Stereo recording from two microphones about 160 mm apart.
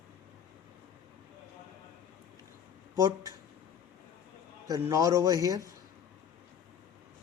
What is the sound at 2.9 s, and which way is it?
Speech, 20° right (ahead or behind).